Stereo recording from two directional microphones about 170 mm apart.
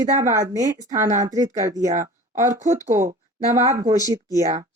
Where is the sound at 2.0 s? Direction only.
45° right (ahead or behind).